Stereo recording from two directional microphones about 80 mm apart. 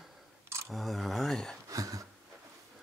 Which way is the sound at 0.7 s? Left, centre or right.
Centre.